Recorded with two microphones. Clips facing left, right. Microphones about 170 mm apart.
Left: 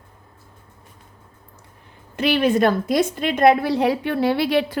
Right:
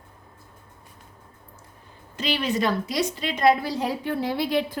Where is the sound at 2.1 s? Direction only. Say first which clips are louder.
Left 8 dB; 55° left (ahead or behind).